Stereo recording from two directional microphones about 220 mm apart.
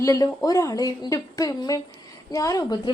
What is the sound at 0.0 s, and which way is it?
A woman's voice, 15° left (ahead or behind).